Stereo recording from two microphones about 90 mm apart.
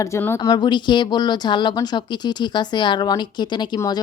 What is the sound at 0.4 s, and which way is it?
Speech, 50° left (ahead or behind).